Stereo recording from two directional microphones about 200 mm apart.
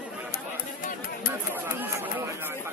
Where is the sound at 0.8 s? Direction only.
45° left (ahead or behind).